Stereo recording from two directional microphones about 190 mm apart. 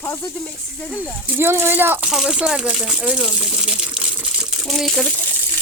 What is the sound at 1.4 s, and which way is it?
Speech, 10° right (ahead or behind).